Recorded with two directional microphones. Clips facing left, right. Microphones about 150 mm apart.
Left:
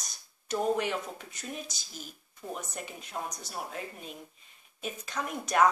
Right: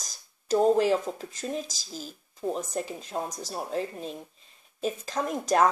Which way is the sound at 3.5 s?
30° right (ahead or behind).